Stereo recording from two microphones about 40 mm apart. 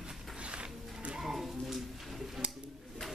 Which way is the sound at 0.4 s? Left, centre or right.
Right.